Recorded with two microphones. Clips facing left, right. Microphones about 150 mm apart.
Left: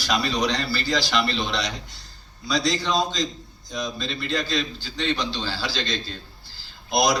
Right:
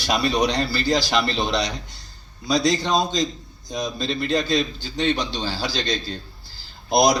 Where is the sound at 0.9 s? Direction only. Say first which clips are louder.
Right 2 dB; 40° right (ahead or behind).